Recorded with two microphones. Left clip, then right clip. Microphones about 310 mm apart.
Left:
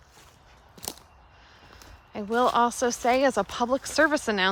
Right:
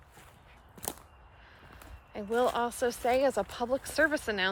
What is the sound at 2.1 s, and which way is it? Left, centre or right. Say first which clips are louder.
Speech: left 6 dB; centre.